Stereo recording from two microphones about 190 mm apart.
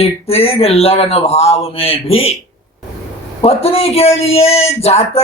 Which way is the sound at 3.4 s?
30° left (ahead or behind).